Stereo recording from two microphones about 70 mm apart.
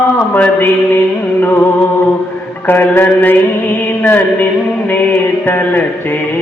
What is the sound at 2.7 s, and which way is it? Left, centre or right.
Music, left.